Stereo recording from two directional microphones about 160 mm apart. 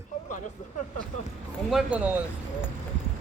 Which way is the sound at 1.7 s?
10° right (ahead or behind).